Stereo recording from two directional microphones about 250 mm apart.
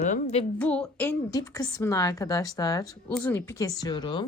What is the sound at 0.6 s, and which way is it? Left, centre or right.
A woman's voice, centre.